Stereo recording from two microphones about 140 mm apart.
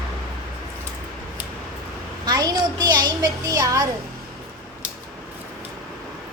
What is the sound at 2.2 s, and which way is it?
A child's voice, 30° right (ahead or behind).